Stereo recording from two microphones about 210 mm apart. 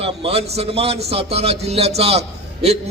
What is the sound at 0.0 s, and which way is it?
A man's voice, 30° right (ahead or behind).